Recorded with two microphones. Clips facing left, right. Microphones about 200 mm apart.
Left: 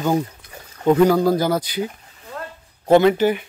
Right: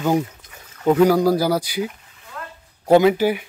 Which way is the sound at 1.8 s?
35° left (ahead or behind).